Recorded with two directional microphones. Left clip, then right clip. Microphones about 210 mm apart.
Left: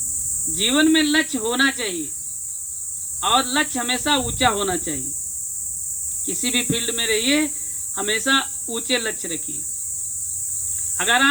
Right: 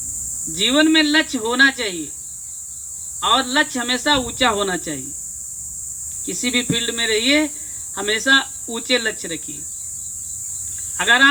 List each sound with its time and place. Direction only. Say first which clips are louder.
0.5 s speech: right 3 dB; 25° right (ahead or behind)
3.2 s speech: right 2 dB; 25° right (ahead or behind)
6.2 s speech: right 2 dB; 25° right (ahead or behind)
10.9 s speech: right 4 dB; 25° right (ahead or behind)